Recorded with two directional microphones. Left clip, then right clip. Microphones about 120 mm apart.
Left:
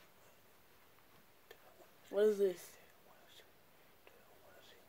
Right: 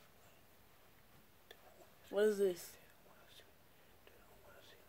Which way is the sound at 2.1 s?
30° right (ahead or behind).